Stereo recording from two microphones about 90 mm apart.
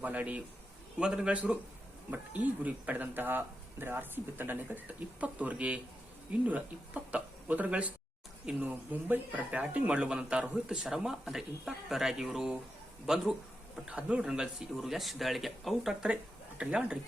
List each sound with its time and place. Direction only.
0.0 s speech: 20° right (ahead or behind)